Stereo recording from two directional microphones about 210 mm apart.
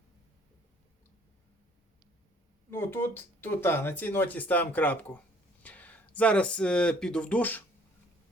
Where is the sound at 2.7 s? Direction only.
10° left (ahead or behind).